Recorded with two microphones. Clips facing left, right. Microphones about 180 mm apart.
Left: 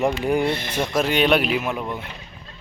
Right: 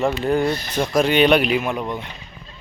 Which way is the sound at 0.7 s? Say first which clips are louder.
Right 3 dB; 5° left (ahead or behind).